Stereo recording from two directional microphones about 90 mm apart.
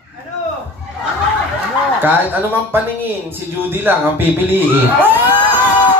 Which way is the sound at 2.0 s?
20° right (ahead or behind).